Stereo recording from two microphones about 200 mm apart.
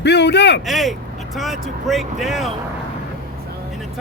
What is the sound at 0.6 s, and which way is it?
Speech, centre (ahead or behind).